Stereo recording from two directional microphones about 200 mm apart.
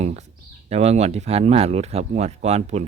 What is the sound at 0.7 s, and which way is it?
Speech, 30° right (ahead or behind).